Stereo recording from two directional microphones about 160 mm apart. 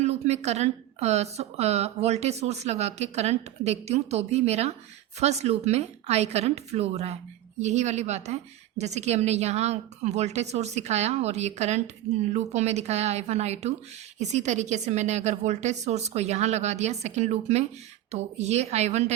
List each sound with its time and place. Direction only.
0.0 s a woman's voice: 45° right (ahead or behind)